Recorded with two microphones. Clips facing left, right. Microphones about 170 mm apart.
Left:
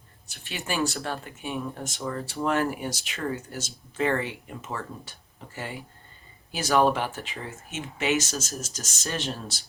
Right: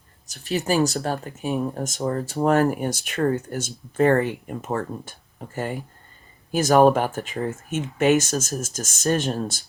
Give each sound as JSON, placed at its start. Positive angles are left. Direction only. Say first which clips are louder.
{"t": 0.3, "sound": "speech", "louder": "right 10 dB", "side_deg": -40}